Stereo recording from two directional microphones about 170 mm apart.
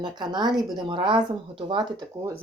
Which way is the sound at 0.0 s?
25° right (ahead or behind).